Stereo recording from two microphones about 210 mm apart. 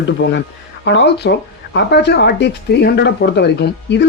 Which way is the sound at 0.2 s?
55° left (ahead or behind).